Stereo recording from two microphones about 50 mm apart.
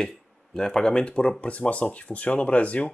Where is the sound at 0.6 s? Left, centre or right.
Centre.